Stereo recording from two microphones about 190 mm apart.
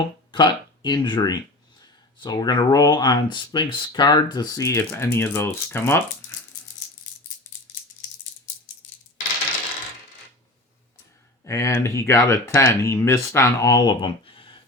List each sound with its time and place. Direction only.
0.3 s speech: 25° left (ahead or behind)
11.4 s speech: 15° left (ahead or behind)